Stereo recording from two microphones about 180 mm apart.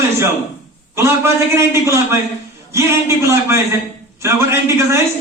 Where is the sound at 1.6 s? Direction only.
15° right (ahead or behind).